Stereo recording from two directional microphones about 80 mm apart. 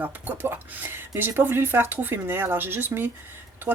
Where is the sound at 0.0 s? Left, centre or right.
Right.